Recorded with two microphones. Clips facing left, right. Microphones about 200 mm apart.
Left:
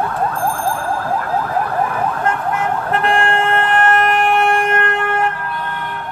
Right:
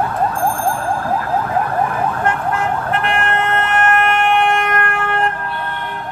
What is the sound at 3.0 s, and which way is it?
Emergency vehicle, 30° left (ahead or behind).